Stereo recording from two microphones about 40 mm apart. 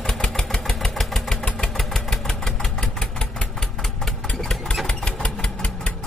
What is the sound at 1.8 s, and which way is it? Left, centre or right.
Engine, centre.